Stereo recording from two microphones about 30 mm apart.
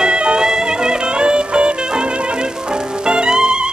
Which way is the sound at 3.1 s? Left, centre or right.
Right.